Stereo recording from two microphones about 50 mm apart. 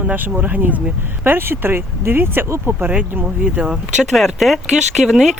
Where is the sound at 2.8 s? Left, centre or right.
Right.